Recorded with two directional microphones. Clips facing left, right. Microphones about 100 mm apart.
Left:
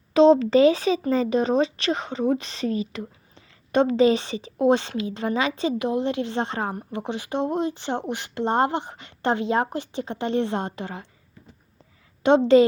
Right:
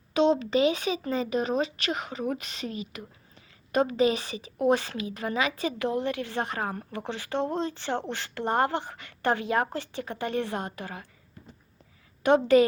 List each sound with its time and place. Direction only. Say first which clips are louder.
0.1 s speech: left 8 dB; 35° left (ahead or behind)
12.2 s speech: left 4 dB; 25° left (ahead or behind)